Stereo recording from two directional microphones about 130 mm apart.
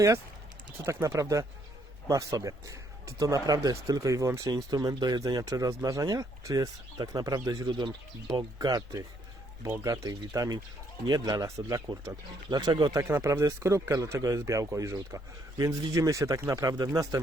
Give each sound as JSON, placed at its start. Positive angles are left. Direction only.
{"t": 0.9, "sound": "speech", "side_deg": -20}